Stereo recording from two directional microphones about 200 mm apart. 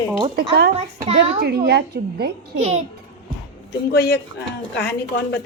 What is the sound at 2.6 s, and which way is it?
Speech, 35° right (ahead or behind).